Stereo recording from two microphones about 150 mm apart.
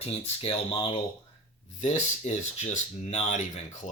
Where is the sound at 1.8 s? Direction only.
50° left (ahead or behind).